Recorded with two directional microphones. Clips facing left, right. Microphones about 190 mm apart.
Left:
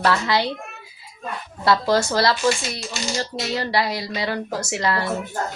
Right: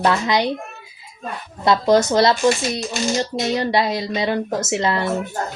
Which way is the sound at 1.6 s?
20° right (ahead or behind).